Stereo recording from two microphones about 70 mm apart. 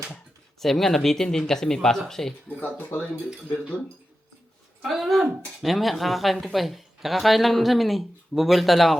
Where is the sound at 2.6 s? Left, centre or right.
Left.